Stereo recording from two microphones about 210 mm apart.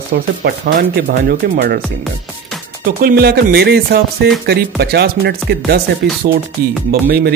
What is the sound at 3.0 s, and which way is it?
Speech, 45° right (ahead or behind).